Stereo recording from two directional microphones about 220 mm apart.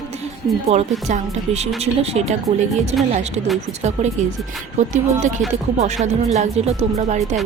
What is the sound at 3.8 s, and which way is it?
Speech, 30° right (ahead or behind).